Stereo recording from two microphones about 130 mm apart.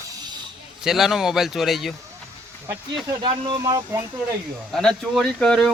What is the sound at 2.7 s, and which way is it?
Speech, 25° right (ahead or behind).